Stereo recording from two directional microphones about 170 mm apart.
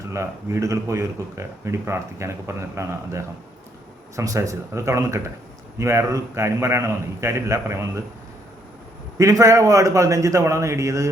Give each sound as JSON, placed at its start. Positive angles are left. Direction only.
{"t": 0.1, "sound": "speech", "side_deg": -15}
{"t": 9.1, "sound": "a man's voice", "side_deg": -20}